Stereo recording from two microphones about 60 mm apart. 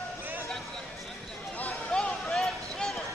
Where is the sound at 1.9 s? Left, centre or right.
Centre.